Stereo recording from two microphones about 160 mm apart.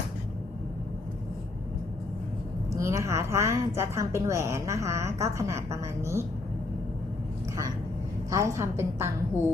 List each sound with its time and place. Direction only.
2.7 s a woman's voice: 20° right (ahead or behind)
8.3 s a woman's voice: 20° right (ahead or behind)